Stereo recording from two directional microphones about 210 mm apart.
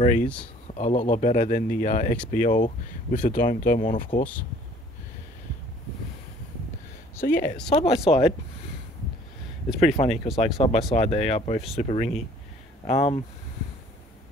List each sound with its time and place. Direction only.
0.7 s speech: 35° left (ahead or behind)
4.2 s speech: 5° left (ahead or behind)
7.2 s speech: 10° left (ahead or behind)
7.7 s speech: 30° left (ahead or behind)
10.0 s speech: centre (ahead or behind)
10.4 s speech: 30° left (ahead or behind)